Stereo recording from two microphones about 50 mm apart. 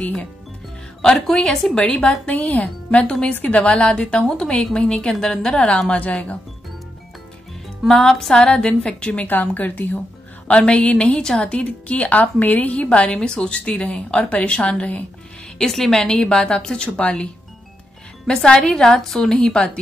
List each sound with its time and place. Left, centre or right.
1.0 s a woman's voice: centre
2.2 s a woman's voice: left; by 5.7 s centre
5.9 s a woman's voice: left
7.9 s a woman's voice: centre
9.3 s speech: left
10.5 s a woman's voice: left
15.6 s a woman's voice: centre